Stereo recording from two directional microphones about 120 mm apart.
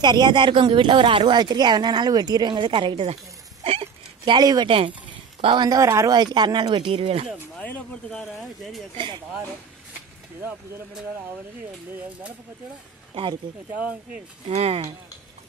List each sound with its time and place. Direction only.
0.0 s speech: 35° right (ahead or behind)
3.6 s a sound: 55° right (ahead or behind)
4.2 s speech: 35° right (ahead or behind)
4.6 s speech: 50° right (ahead or behind)
5.7 s speech: 25° right (ahead or behind); by 7.2 s 55° right (ahead or behind)
7.5 s speech: 10° left (ahead or behind)
8.2 s speech: centre (ahead or behind)
8.9 s speech: 40° right (ahead or behind)
13.1 s speech: 45° right (ahead or behind)
14.4 s speech: 55° right (ahead or behind)